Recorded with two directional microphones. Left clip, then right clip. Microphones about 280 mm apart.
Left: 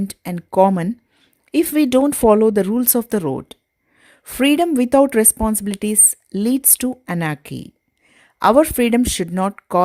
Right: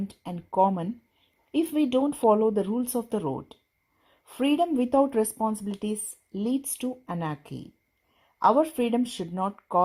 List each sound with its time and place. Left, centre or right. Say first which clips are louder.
0.5 s speech: left 9 dB; left